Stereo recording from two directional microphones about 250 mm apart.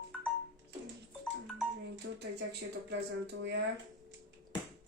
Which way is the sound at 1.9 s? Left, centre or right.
Right.